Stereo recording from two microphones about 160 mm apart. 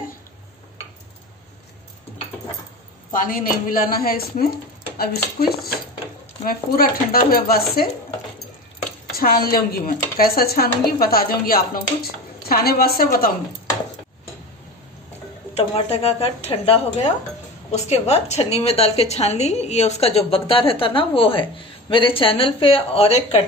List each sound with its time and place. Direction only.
3.1 s a woman's voice: 60° left (ahead or behind)
9.1 s speech: 65° left (ahead or behind)
15.5 s a woman's voice: 40° left (ahead or behind)